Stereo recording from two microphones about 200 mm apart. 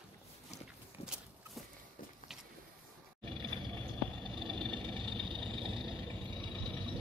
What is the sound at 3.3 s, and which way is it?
Music, 25° right (ahead or behind).